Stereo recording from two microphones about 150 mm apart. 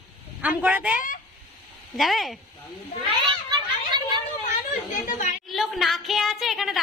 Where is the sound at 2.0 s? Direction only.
Centre (ahead or behind).